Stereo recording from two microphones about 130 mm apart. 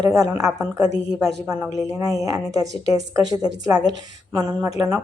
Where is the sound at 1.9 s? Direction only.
25° right (ahead or behind).